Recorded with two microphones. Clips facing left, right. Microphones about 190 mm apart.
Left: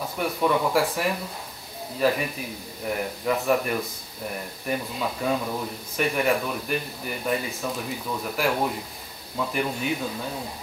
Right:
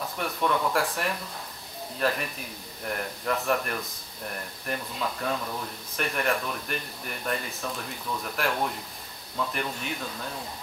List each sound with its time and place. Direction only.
0.2 s speech: 5° left (ahead or behind)